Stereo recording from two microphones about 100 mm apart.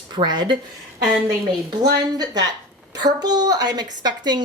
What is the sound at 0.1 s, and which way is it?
Speech, 45° right (ahead or behind).